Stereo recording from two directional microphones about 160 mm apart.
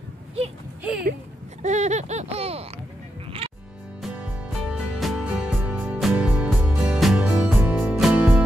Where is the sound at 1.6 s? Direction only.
45° right (ahead or behind).